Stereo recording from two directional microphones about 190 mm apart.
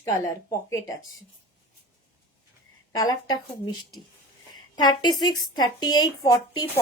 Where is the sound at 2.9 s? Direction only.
20° left (ahead or behind).